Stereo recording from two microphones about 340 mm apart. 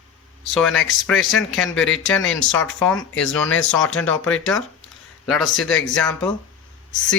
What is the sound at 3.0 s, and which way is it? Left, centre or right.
Speech, left.